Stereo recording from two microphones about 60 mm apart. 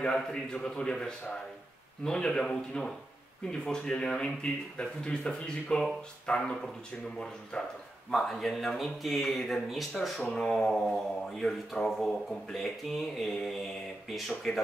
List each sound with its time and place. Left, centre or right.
0.0 s speech: centre
8.1 s speech: centre